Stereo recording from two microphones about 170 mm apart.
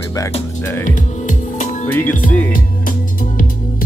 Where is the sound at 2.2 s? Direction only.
10° left (ahead or behind).